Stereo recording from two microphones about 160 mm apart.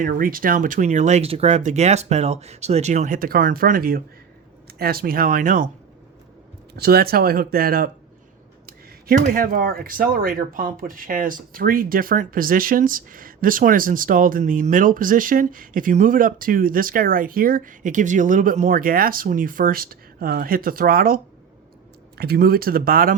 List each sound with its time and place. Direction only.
0.0 s speech: 60° right (ahead or behind)
6.7 s speech: 75° right (ahead or behind)
22.2 s speech: 75° right (ahead or behind)